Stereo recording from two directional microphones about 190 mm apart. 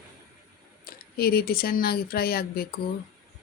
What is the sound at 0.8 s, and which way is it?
Speech, 50° left (ahead or behind).